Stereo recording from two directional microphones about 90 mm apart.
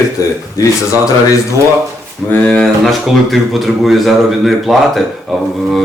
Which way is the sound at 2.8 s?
Centre (ahead or behind).